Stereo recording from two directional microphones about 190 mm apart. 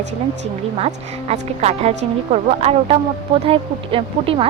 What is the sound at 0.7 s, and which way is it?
A woman's voice, 35° right (ahead or behind).